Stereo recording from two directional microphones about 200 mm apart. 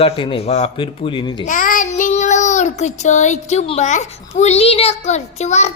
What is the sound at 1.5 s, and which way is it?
Child singing, 40° left (ahead or behind).